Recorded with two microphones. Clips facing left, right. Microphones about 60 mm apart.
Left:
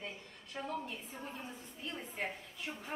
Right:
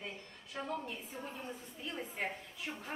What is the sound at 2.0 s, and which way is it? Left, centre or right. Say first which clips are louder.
Speech: right 2 dB; centre.